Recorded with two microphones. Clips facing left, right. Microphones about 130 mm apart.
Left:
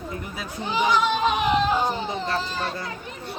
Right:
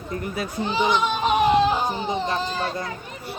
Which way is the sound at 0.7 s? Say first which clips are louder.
Left 1 dB; 25° right (ahead or behind).